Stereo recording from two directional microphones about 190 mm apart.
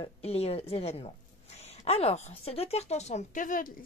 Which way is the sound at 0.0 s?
30° left (ahead or behind).